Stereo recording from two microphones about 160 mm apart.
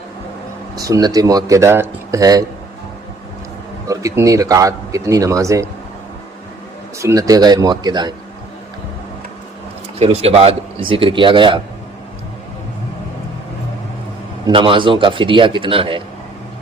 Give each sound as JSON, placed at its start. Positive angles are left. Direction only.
{"t": 0.8, "sound": "speech", "side_deg": -20}
{"t": 3.8, "sound": "speech", "side_deg": -20}
{"t": 7.0, "sound": "speech", "side_deg": -20}
{"t": 10.0, "sound": "speech", "side_deg": -40}
{"t": 14.4, "sound": "speech", "side_deg": -30}